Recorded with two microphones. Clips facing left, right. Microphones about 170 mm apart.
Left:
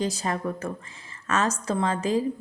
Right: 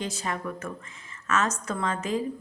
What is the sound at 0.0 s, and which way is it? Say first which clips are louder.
A woman's voice: left 4 dB; 35° left (ahead or behind).